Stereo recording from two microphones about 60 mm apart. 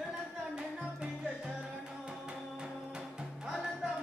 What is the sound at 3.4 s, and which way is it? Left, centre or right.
Music, centre.